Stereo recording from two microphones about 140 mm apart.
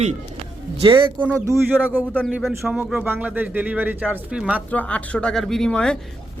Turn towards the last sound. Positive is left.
turn(degrees=5)  # may be behind; listen again after turning